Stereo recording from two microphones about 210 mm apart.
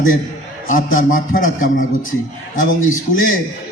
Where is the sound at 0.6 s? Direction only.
40° left (ahead or behind).